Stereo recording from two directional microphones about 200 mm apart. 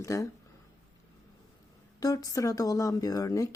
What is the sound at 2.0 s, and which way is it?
Speech, 15° left (ahead or behind).